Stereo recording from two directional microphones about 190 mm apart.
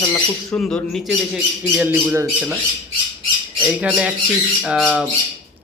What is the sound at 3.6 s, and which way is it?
Speech, 5° right (ahead or behind).